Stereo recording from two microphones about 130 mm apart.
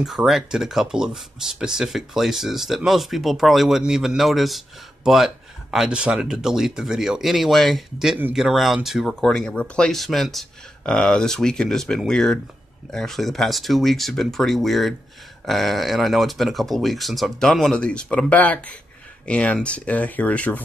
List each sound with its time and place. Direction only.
0.0 s speech: centre (ahead or behind)